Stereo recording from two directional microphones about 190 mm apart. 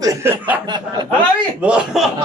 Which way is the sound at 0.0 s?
15° right (ahead or behind).